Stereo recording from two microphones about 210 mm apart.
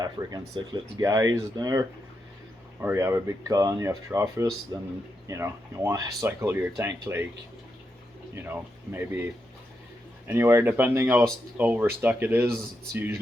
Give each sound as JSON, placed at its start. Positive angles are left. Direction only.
{"t": 0.0, "sound": "speech", "side_deg": -20}
{"t": 8.4, "sound": "speech", "side_deg": -10}